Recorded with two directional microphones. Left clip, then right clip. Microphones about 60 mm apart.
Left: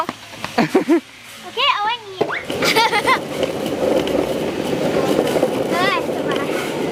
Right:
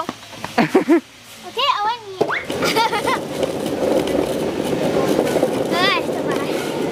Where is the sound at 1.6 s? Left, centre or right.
Right.